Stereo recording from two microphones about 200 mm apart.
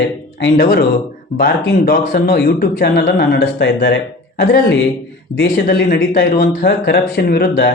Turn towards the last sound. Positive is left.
turn(degrees=50)  # may be behind; listen again after turning